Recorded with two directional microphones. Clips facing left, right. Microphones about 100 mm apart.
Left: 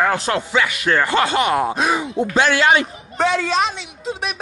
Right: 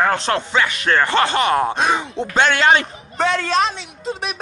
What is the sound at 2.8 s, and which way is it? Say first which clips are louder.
Speech: left 1 dB; centre (ahead or behind).